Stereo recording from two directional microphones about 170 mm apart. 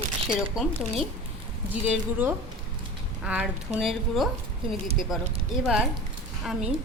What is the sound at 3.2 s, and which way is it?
A woman's voice, 5° right (ahead or behind).